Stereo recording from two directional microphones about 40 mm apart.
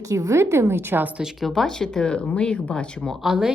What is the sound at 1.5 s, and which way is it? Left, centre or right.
Speech, centre.